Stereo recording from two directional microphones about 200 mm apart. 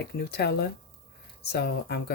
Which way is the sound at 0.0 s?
50° left (ahead or behind).